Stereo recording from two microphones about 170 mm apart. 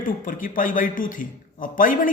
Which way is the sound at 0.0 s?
55° left (ahead or behind).